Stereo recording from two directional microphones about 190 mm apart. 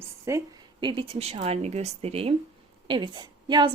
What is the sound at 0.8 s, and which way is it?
A woman's voice, 25° right (ahead or behind).